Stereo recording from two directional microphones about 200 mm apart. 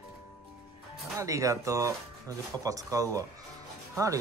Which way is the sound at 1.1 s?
15° right (ahead or behind).